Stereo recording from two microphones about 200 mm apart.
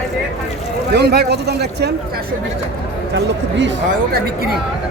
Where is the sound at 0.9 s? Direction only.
55° right (ahead or behind).